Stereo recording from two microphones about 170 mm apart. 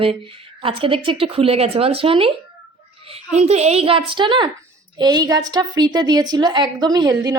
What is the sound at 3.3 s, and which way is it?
A woman's voice, 40° right (ahead or behind).